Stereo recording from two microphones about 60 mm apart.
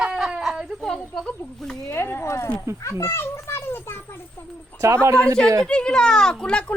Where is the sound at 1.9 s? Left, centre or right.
Left.